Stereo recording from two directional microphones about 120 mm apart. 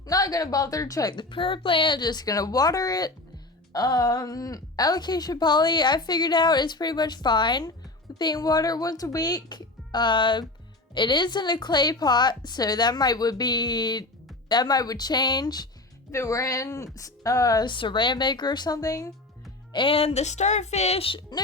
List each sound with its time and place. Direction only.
0.1 s a woman's voice: 30° left (ahead or behind)
1.1 s a woman's voice: 45° left (ahead or behind)
19.7 s speech: 50° left (ahead or behind)